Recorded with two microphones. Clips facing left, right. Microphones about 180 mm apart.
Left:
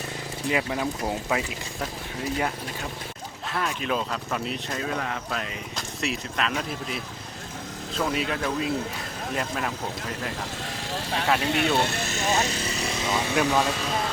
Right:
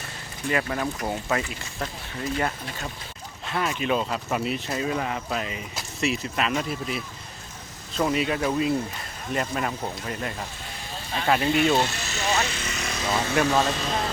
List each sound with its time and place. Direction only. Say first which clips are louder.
0.4 s speech: even; 10° left (ahead or behind)
3.4 s speech: right 2 dB; centre (ahead or behind)
7.9 s speech: right 3 dB; centre (ahead or behind)
10.8 s vehicle: left 2 dB; 80° left
11.3 s speech: right 5 dB; 70° left (ahead or behind); by 12.4 s 50° left (ahead or behind)
12.5 s speech: left 3 dB; 35° left (ahead or behind)
13.1 s speech: right 1 dB; 10° left (ahead or behind)